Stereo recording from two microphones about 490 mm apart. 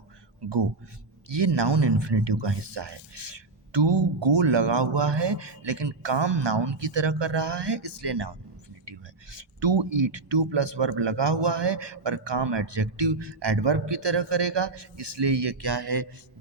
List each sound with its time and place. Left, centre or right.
1.3 s speech: right